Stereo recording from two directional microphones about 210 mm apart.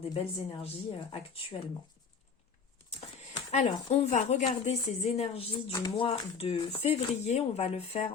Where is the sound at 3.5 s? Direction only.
30° left (ahead or behind).